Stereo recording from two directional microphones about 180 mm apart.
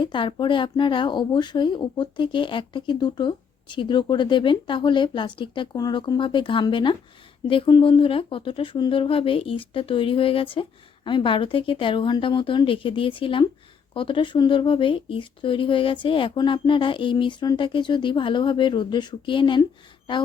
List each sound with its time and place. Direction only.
0.0 s speech: 25° left (ahead or behind)